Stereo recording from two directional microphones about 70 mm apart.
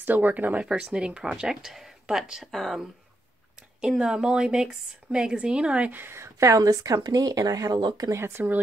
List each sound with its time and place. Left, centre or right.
0.0 s speech: right; by 2.8 s centre
3.8 s speech: centre; by 6.1 s right
6.1 s speech: right
8.1 s speech: right